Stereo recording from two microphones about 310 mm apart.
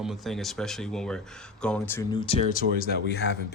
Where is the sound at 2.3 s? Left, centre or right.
Centre.